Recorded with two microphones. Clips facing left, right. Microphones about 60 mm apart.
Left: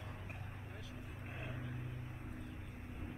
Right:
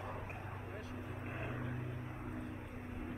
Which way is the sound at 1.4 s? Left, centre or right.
Right.